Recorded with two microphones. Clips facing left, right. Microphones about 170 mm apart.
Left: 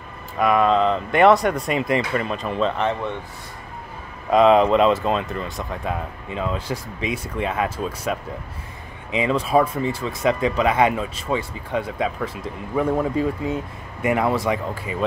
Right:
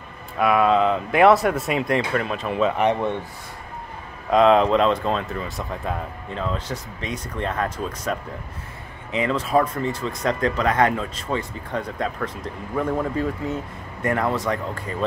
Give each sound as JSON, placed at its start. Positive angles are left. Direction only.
{"t": 0.4, "sound": "speech", "side_deg": -5}
{"t": 2.8, "sound": "speech", "side_deg": -15}
{"t": 4.3, "sound": "speech", "side_deg": 0}